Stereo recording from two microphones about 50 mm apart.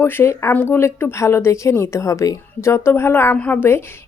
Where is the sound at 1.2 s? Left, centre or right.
Left.